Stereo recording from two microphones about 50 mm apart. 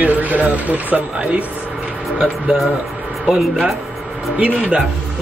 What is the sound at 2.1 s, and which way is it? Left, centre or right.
Speech, centre.